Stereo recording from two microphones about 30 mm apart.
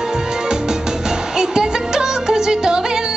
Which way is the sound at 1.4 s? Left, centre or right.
Right.